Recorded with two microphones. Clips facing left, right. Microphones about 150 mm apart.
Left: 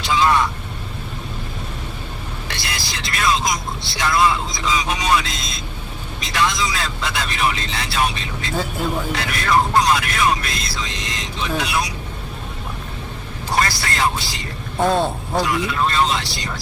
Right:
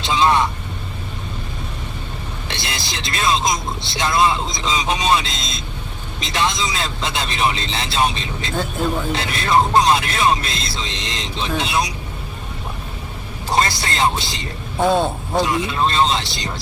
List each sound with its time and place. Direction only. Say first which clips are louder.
0.0 s vehicle: right 1 dB; 20° right (ahead or behind)
2.5 s speech: right 2 dB; 25° right (ahead or behind)
8.5 s speech: right 1 dB; centre (ahead or behind)
9.1 s speech: right 1 dB; 25° right (ahead or behind)
13.5 s speech: right 2 dB; 20° right (ahead or behind)
14.8 s speech: right 1 dB; centre (ahead or behind)
15.4 s speech: right 1 dB; 25° right (ahead or behind)